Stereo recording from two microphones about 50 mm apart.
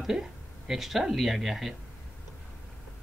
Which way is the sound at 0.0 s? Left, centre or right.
Centre.